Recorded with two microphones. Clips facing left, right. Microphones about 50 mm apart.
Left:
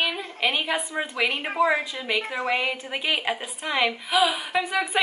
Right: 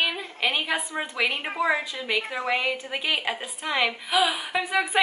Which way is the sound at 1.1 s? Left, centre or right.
Centre.